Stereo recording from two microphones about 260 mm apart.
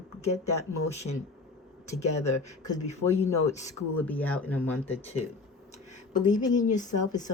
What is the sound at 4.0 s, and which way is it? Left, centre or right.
Speech, centre.